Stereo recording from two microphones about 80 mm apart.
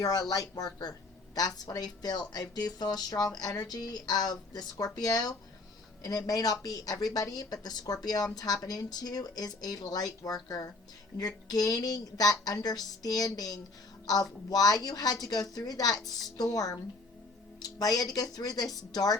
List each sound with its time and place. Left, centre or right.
0.0 s a woman's voice: left